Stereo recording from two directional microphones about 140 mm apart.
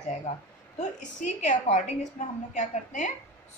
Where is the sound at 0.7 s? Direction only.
60° left (ahead or behind).